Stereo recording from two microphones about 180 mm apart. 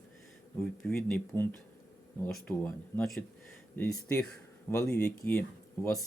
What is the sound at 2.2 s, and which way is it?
Speech, 10° left (ahead or behind).